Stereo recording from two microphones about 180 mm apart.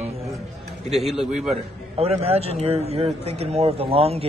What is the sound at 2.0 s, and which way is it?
A man's voice, 35° right (ahead or behind).